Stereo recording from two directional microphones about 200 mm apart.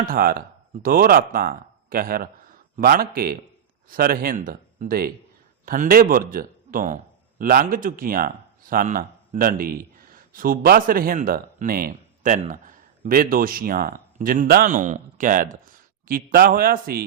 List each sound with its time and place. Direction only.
0.0 s a man's voice: 45° right (ahead or behind)